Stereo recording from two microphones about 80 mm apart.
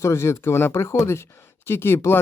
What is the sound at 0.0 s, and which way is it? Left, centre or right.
Speech, left.